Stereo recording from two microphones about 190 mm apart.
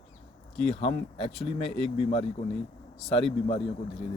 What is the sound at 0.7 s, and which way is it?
Speech, 30° left (ahead or behind).